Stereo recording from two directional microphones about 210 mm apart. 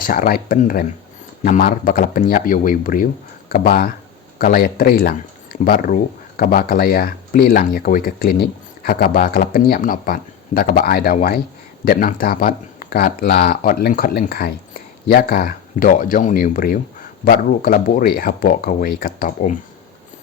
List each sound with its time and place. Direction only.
0.0 s speech: 45° left (ahead or behind)